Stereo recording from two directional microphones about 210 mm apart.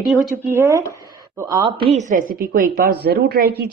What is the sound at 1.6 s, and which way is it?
A woman's voice, 25° right (ahead or behind).